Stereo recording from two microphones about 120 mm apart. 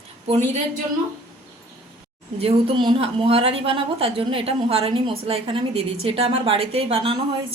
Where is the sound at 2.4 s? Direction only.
55° right (ahead or behind).